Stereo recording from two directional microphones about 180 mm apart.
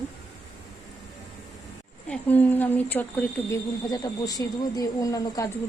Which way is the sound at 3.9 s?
20° left (ahead or behind).